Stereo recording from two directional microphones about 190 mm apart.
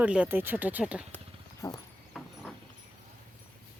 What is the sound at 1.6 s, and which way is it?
Dog, 15° left (ahead or behind).